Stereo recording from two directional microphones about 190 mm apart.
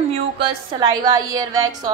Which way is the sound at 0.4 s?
20° right (ahead or behind).